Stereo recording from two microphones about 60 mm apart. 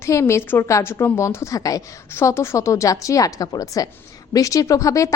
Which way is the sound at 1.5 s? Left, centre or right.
Left.